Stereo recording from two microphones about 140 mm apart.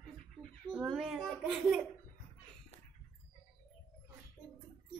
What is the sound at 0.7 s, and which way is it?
A child's voice, 5° right (ahead or behind).